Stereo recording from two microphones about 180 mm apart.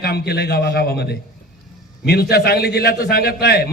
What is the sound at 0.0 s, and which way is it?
A man's voice, 65° left (ahead or behind).